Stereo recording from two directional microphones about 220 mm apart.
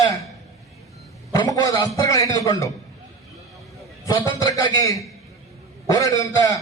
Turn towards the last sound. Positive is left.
turn(degrees=15)  # may be behind; listen again after turning